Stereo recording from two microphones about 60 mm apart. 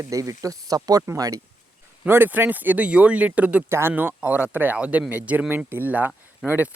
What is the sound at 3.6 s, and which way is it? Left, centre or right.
Speech, right.